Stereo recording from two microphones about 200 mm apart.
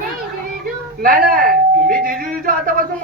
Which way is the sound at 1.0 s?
45° right (ahead or behind).